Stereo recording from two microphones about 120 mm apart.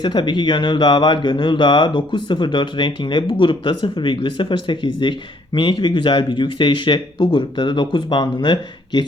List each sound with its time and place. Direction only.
0.0 s speech: 40° left (ahead or behind)